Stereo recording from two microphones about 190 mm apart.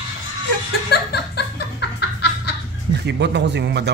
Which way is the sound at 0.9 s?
60° left (ahead or behind).